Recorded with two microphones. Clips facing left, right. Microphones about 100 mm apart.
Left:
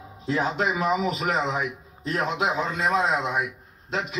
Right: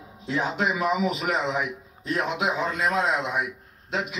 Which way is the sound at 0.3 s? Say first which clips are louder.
Left 1 dB; 35° left (ahead or behind).